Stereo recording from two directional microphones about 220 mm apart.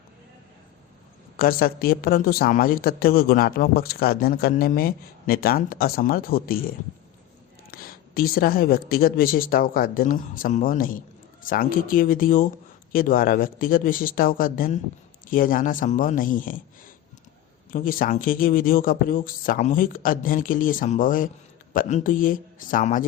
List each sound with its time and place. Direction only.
1.4 s a woman's voice: 40° left (ahead or behind)
7.7 s speech: 40° left (ahead or behind)
17.7 s speech: 40° left (ahead or behind)